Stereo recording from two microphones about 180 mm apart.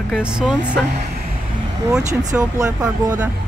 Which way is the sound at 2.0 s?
40° right (ahead or behind).